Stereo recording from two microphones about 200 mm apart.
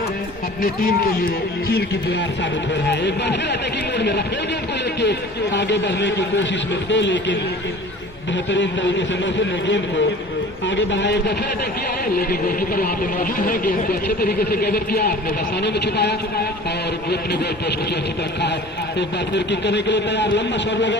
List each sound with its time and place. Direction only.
0.6 s speech: 45° left (ahead or behind)
1.7 s speech: 55° left (ahead or behind)
8.4 s speech: 65° left (ahead or behind)
12.3 s speech: 45° left (ahead or behind)
18.9 s speech: 60° left (ahead or behind)